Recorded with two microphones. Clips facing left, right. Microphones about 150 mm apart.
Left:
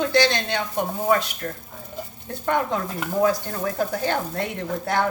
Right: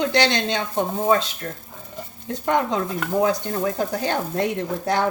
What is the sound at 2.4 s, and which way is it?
Speech, 20° right (ahead or behind).